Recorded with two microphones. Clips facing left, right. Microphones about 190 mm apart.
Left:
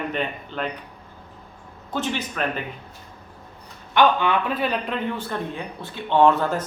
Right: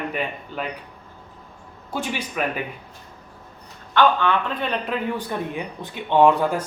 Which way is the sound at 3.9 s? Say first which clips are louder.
Even; 15° left (ahead or behind).